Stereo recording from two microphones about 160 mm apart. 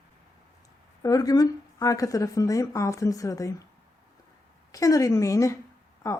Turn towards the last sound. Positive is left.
turn(degrees=20)  # may be behind; listen again after turning